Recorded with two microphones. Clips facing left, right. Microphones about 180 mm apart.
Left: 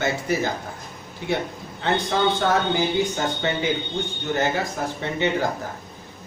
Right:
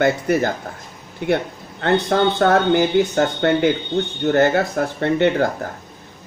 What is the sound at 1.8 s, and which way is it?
Speech, 60° right (ahead or behind).